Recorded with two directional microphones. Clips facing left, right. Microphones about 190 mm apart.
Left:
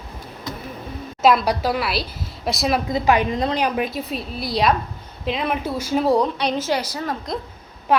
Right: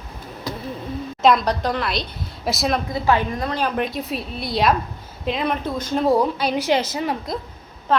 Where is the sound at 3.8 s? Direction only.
Centre (ahead or behind); by 7.1 s 20° right (ahead or behind).